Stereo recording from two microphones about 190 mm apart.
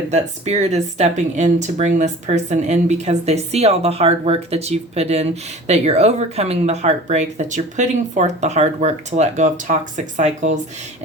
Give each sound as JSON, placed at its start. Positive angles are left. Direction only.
{"t": 0.1, "sound": "speech", "side_deg": -35}